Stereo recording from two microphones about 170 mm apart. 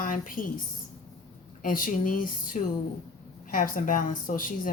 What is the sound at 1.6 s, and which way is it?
A woman's voice, 55° left (ahead or behind).